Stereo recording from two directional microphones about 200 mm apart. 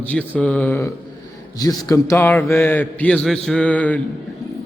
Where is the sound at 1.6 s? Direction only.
20° left (ahead or behind).